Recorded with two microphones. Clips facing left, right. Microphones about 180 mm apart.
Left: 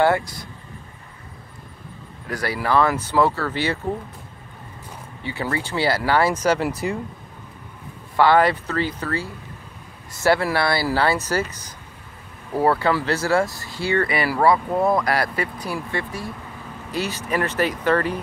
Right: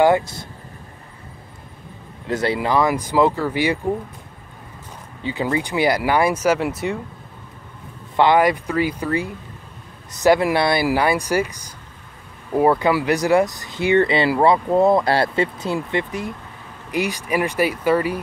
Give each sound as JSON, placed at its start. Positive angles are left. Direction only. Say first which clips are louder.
{"t": 0.0, "sound": "speech", "louder": "right 3 dB", "side_deg": -20}
{"t": 2.2, "sound": "speech", "louder": "right 4 dB", "side_deg": -25}
{"t": 5.2, "sound": "speech", "louder": "right 4 dB", "side_deg": -20}
{"t": 8.2, "sound": "speech", "louder": "right 1 dB", "side_deg": -15}